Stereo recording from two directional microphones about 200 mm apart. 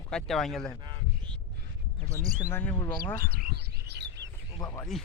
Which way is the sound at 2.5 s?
10° left (ahead or behind).